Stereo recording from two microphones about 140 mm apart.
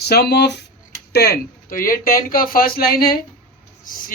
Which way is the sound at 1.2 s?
90° left.